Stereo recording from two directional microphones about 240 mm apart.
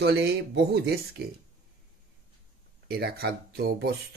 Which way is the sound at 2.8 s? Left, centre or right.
Right.